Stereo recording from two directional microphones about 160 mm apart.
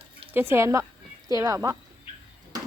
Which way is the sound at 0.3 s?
15° right (ahead or behind).